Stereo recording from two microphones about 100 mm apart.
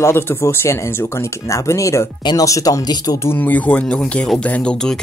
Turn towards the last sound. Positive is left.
turn(degrees=5)  # may be behind; listen again after turning